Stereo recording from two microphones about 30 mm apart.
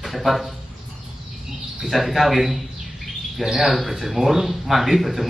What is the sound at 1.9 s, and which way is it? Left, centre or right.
Speech, centre.